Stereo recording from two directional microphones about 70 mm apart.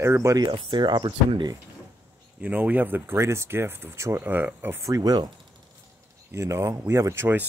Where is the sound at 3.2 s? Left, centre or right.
Right.